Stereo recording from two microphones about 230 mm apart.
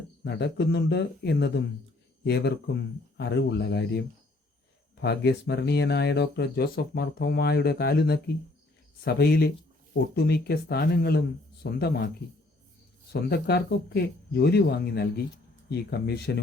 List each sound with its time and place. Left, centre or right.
0.3 s speech: left
13.1 s speech: left